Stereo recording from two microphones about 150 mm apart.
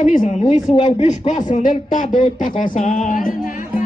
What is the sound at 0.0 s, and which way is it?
A man's voice, 60° left (ahead or behind).